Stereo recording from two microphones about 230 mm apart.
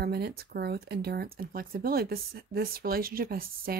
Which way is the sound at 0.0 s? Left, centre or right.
Right.